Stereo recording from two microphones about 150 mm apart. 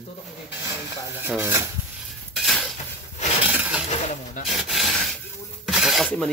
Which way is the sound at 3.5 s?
10° right (ahead or behind).